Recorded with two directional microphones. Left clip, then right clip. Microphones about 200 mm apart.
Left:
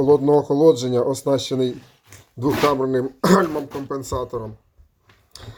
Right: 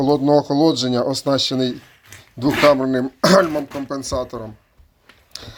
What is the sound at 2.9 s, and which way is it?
Speech, 70° right (ahead or behind).